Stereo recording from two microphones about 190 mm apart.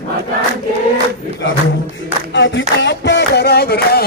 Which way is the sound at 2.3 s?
75° left (ahead or behind).